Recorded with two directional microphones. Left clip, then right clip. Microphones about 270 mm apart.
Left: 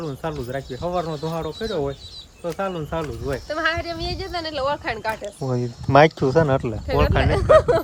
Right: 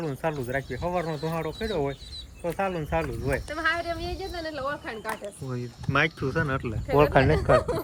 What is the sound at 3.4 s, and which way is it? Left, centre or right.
Speech, left.